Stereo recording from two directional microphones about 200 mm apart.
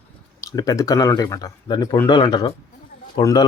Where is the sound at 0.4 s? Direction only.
20° left (ahead or behind).